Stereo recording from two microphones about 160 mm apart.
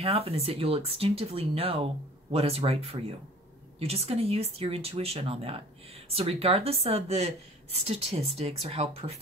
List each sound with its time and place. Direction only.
0.0 s speech: 40° right (ahead or behind)